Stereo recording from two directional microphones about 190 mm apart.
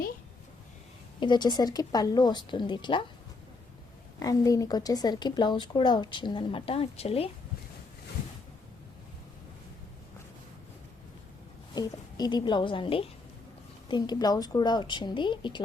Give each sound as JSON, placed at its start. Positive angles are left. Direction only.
{"t": 1.2, "sound": "speech", "side_deg": 25}
{"t": 4.2, "sound": "speech", "side_deg": 20}
{"t": 11.7, "sound": "speech", "side_deg": 20}